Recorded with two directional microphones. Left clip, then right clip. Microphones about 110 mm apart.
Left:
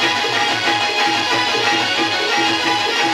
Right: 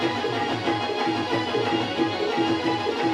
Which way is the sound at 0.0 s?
25° left (ahead or behind).